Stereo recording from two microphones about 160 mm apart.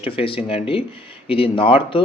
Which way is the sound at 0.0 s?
35° left (ahead or behind).